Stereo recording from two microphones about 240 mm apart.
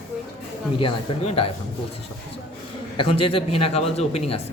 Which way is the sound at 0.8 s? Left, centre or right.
Left.